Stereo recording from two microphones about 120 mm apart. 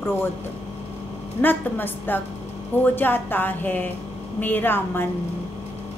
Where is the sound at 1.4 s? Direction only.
15° left (ahead or behind).